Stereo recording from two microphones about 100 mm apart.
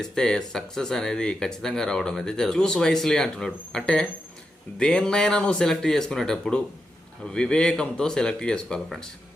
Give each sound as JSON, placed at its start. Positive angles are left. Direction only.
{"t": 0.0, "sound": "speech", "side_deg": 5}